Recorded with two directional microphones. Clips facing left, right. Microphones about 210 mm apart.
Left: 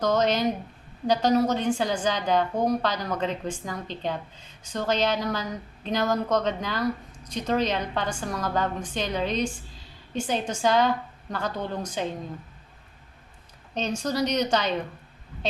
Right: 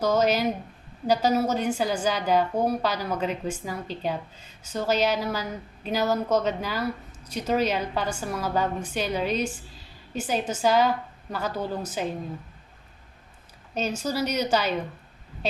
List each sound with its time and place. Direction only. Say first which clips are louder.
0.0 s a woman's voice: right 1 dB; 10° right (ahead or behind)
13.7 s a woman's voice: left 1 dB; 5° right (ahead or behind)